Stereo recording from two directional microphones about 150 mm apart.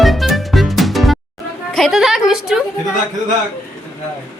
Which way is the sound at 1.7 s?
Centre (ahead or behind).